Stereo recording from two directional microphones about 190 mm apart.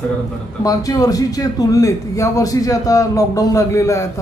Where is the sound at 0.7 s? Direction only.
20° left (ahead or behind).